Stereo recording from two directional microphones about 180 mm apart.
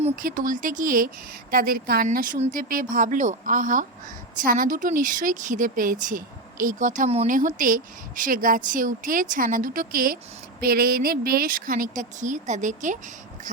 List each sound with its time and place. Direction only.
0.0 s speech: 50° right (ahead or behind)